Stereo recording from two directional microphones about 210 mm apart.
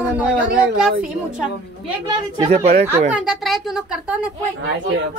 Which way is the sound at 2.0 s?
25° right (ahead or behind).